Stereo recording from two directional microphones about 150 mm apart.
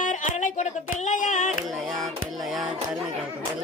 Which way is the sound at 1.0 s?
60° left (ahead or behind).